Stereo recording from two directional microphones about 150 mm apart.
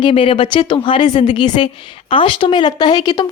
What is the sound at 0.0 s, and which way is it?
A woman's voice, 35° left (ahead or behind).